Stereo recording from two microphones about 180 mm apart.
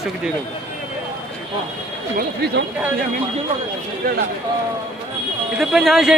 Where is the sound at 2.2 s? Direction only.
65° right (ahead or behind).